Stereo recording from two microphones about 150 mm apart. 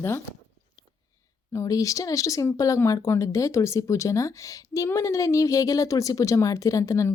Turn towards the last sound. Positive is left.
turn(degrees=20)  # may be behind; listen again after turning